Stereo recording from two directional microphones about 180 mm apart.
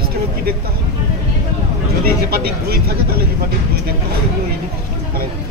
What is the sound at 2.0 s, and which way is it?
Speech, 60° right (ahead or behind).